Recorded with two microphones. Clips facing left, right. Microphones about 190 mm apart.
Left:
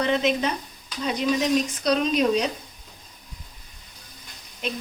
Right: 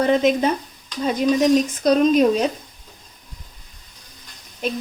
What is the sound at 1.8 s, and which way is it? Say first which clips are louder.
Speech: right 8 dB; 45° right (ahead or behind).